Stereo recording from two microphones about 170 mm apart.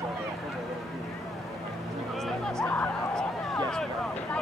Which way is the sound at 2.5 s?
5° left (ahead or behind).